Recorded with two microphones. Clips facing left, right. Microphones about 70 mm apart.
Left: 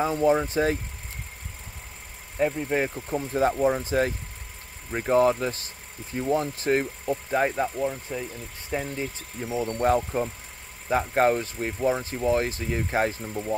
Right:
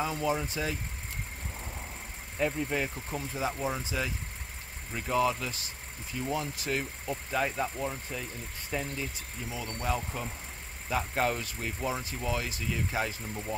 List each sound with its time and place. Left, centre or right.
0.0 s speech: left
2.3 s speech: left
3.3 s speech: left
9.4 s speech: left
13.3 s speech: left